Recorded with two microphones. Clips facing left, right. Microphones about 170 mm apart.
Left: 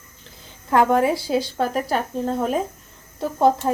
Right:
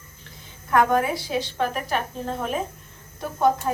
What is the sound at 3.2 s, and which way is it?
Speech, 30° left (ahead or behind).